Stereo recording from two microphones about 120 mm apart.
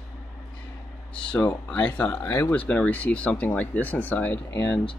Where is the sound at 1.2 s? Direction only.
10° left (ahead or behind).